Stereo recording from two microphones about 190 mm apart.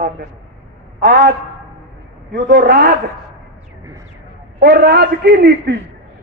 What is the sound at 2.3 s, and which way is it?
Speech, 55° right (ahead or behind).